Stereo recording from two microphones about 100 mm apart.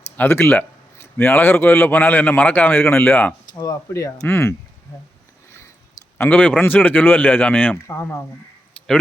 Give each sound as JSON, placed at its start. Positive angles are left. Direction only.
{"t": 0.2, "sound": "speech", "side_deg": 20}
{"t": 3.6, "sound": "speech", "side_deg": 35}
{"t": 4.3, "sound": "speech", "side_deg": 25}
{"t": 6.1, "sound": "speech", "side_deg": 15}
{"t": 7.9, "sound": "speech", "side_deg": 25}